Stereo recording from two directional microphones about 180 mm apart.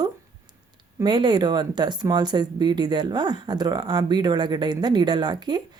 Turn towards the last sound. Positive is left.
turn(degrees=-25)  # may be behind; listen again after turning